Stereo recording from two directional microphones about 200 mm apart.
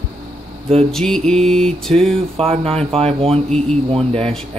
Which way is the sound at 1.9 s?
30° right (ahead or behind).